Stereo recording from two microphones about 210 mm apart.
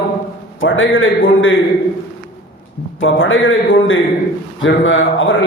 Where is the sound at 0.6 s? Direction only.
70° left (ahead or behind).